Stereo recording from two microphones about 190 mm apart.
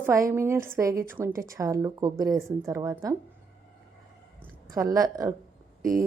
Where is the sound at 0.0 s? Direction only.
15° right (ahead or behind).